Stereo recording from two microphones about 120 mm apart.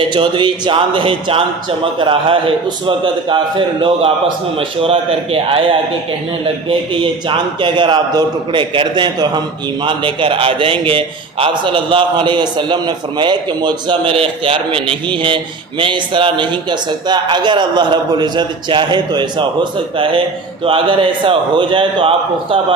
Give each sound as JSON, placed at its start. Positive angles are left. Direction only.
{"t": 0.0, "sound": "a man's voice", "side_deg": -45}
{"t": 4.8, "sound": "a man's voice", "side_deg": -50}
{"t": 6.7, "sound": "a man's voice", "side_deg": -45}